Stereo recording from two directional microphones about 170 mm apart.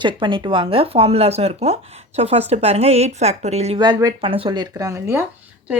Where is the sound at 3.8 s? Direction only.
25° right (ahead or behind).